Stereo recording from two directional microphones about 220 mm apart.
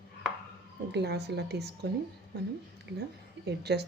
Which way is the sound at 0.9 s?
50° right (ahead or behind).